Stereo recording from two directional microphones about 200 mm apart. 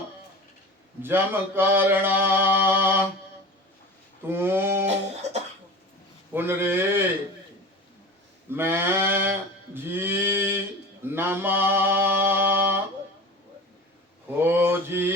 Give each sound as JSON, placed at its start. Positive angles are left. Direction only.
{"t": 1.0, "sound": "mantra", "side_deg": -10}
{"t": 4.3, "sound": "mantra", "side_deg": -10}
{"t": 6.3, "sound": "mantra", "side_deg": -10}
{"t": 8.4, "sound": "a sound", "side_deg": -10}
{"t": 11.0, "sound": "mantra", "side_deg": -10}
{"t": 14.3, "sound": "mantra", "side_deg": -10}